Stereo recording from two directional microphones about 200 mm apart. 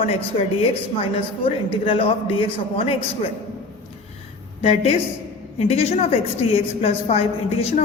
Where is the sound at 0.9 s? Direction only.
30° left (ahead or behind).